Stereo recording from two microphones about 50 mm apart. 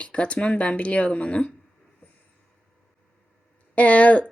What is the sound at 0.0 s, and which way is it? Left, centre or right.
Speech, left.